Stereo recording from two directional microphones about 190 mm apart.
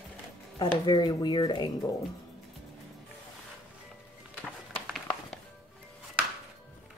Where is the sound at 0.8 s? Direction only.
25° left (ahead or behind).